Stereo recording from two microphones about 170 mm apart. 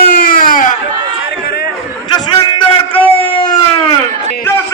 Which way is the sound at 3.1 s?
30° left (ahead or behind).